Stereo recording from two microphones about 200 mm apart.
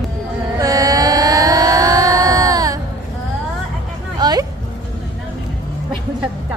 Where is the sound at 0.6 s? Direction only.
15° right (ahead or behind).